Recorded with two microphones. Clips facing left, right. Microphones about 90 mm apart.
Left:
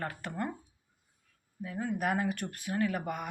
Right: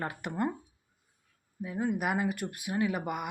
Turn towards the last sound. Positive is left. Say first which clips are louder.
# right 1 dB
turn(degrees=-10)  # may be behind; listen again after turning